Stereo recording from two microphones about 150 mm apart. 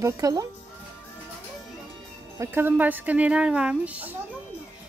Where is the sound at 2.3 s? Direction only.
15° right (ahead or behind).